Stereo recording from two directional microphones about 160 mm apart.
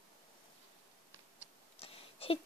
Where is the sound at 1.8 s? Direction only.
35° left (ahead or behind).